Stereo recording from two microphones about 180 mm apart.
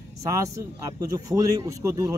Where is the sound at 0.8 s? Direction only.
20° right (ahead or behind).